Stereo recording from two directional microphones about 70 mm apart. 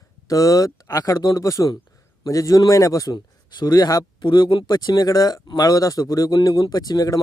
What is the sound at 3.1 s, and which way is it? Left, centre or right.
Speech, left.